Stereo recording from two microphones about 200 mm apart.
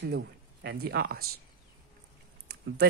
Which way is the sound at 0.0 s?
55° right (ahead or behind).